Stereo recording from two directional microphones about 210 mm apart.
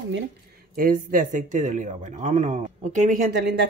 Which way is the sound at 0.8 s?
40° right (ahead or behind).